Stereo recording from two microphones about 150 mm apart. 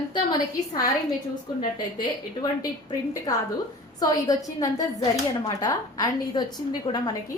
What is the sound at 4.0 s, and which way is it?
A woman's voice, 25° left (ahead or behind).